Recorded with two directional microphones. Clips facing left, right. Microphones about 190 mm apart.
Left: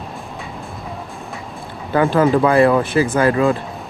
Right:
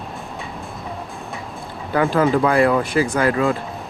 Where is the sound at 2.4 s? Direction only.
25° left (ahead or behind).